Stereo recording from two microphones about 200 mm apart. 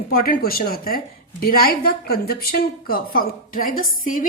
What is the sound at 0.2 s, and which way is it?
A woman's voice, 45° left (ahead or behind).